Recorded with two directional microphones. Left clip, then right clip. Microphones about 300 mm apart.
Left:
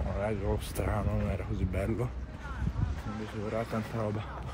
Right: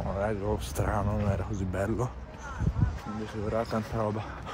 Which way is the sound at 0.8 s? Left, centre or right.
Centre.